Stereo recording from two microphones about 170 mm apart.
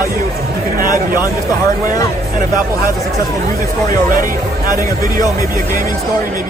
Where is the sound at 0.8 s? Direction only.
55° right (ahead or behind).